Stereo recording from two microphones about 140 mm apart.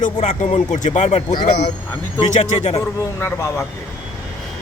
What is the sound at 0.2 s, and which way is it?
Speech, 55° left (ahead or behind).